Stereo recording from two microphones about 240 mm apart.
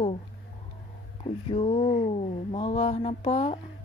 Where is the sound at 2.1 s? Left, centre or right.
Left.